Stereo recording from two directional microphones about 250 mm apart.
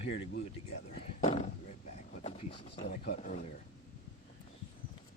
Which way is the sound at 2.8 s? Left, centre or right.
Left.